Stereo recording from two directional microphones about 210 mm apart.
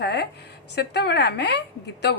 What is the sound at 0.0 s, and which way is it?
A woman's voice, 50° left (ahead or behind).